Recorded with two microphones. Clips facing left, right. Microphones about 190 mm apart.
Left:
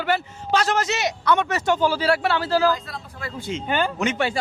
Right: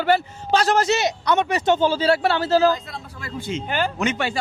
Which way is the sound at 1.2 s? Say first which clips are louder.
Right 1 dB; 20° right (ahead or behind).